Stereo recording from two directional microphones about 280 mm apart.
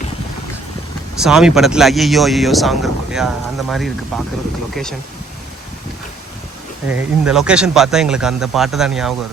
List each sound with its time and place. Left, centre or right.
1.2 s speech: centre
6.8 s speech: centre